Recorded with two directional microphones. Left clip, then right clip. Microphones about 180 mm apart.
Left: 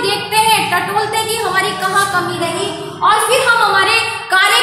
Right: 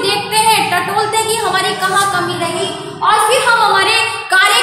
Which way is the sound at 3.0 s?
10° right (ahead or behind).